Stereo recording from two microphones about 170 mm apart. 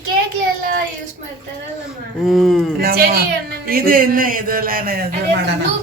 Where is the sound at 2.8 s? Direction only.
60° right (ahead or behind).